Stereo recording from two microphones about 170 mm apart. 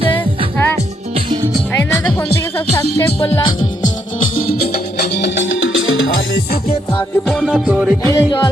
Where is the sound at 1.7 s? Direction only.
15° left (ahead or behind).